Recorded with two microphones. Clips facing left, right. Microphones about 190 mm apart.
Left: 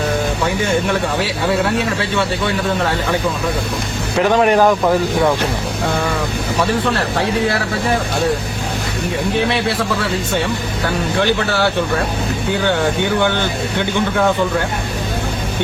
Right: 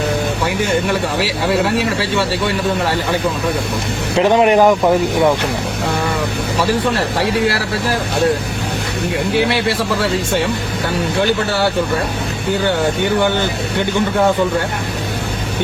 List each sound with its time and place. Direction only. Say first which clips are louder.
4.2 s speech: right 2 dB; 20° right (ahead or behind)